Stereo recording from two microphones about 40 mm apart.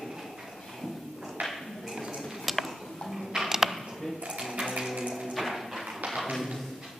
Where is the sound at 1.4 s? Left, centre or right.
Right.